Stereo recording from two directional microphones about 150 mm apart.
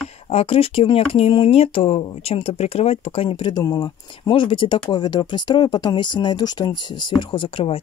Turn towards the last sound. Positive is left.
turn(degrees=35)  # may be behind; listen again after turning